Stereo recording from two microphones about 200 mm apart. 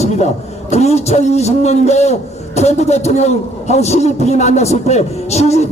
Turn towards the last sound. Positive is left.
turn(degrees=35)  # may be behind; listen again after turning